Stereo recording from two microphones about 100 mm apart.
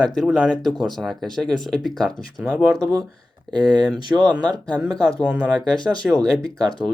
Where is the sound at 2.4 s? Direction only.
10° right (ahead or behind).